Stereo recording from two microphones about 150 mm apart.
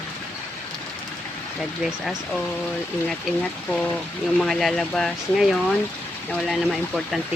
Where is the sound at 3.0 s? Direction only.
5° left (ahead or behind).